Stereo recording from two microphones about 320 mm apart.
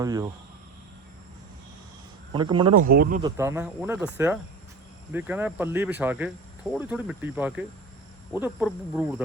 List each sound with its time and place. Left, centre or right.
0.0 s speech: centre
2.3 s speech: centre
2.8 s speech: right
3.2 s speech: centre